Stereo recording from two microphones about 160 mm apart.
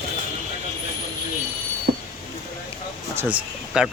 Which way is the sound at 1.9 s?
65° right (ahead or behind).